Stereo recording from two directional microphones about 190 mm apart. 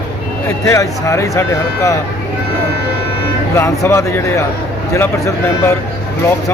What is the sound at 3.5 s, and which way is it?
Speech, 15° left (ahead or behind).